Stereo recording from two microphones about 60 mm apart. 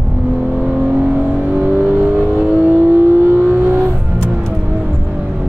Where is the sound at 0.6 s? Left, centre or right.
Right.